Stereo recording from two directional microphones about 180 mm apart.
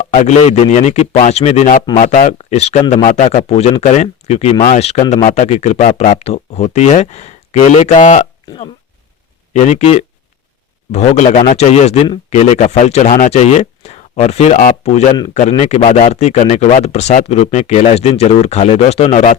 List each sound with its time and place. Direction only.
0.1 s speech: 40° left (ahead or behind)
8.4 s speech: 30° left (ahead or behind)